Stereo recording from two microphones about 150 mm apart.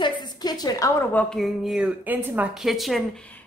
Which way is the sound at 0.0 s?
30° left (ahead or behind).